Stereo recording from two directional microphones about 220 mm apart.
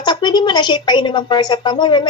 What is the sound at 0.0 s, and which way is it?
A woman's voice, 20° left (ahead or behind).